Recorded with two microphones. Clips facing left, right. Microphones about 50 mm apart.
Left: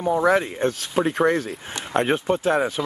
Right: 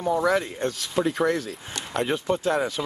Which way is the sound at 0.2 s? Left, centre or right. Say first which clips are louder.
Left 4 dB; left.